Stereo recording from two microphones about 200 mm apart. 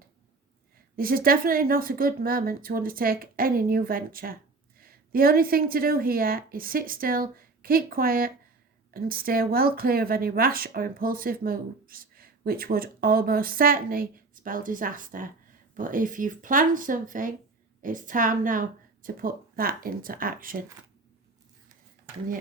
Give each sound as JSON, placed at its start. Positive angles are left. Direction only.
{"t": 0.9, "sound": "a woman's voice", "side_deg": -45}